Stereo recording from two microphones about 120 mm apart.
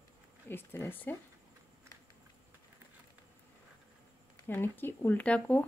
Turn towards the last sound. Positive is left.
turn(degrees=10)  # may be behind; listen again after turning